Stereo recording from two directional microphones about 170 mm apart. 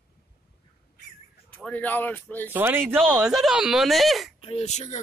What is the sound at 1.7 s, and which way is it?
Speech, 10° left (ahead or behind).